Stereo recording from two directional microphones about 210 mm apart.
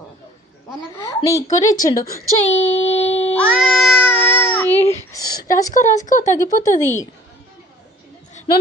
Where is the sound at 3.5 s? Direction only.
5° left (ahead or behind).